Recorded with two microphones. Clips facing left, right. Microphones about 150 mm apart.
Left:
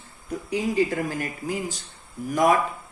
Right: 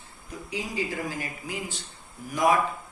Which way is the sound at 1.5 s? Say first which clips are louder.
Left 8 dB; 40° left (ahead or behind).